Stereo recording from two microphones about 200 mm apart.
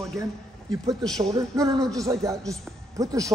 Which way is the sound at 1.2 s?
20° right (ahead or behind).